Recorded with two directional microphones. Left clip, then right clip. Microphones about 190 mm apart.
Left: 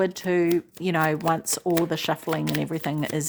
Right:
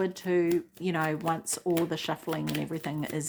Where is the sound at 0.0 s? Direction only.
40° left (ahead or behind).